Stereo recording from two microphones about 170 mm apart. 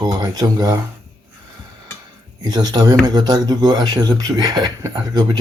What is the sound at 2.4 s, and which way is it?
Speech, 25° right (ahead or behind).